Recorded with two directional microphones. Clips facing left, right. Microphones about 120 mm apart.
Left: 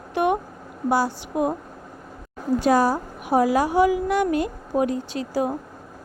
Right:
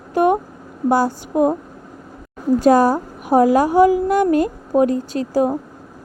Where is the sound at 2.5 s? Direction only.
45° right (ahead or behind).